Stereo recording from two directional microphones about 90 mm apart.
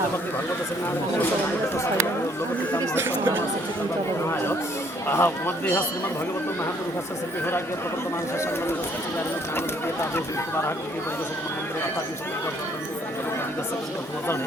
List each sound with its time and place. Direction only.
2.9 s speech: 25° right (ahead or behind)
5.0 s speech: 25° left (ahead or behind)
9.6 s speech: 30° left (ahead or behind)